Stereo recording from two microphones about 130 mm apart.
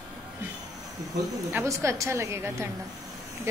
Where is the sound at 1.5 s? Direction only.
20° right (ahead or behind).